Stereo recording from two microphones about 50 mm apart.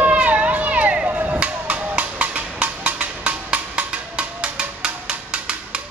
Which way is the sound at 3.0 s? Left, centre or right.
Right.